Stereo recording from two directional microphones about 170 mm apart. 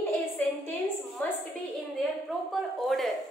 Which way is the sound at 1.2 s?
10° left (ahead or behind).